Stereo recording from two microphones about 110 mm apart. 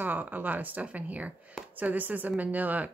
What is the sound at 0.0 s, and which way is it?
A woman's voice, 15° right (ahead or behind).